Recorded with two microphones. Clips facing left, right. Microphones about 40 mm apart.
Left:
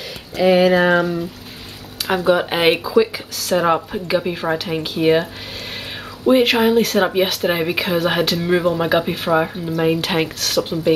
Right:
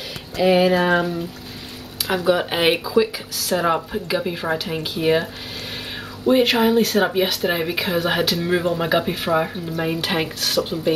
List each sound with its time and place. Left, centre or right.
0.4 s speech: centre